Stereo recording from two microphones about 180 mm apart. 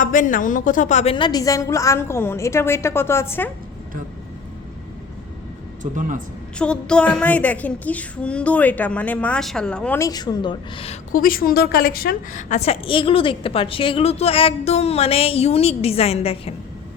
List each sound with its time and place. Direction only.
0.0 s a woman's voice: 45° left (ahead or behind)
1.1 s speech: 25° left (ahead or behind)
5.8 s a man's voice: 45° right (ahead or behind)
6.6 s speech: 5° left (ahead or behind)
10.1 s speech: 20° left (ahead or behind)
11.1 s a woman's voice: 50° left (ahead or behind); by 16.6 s 35° left (ahead or behind)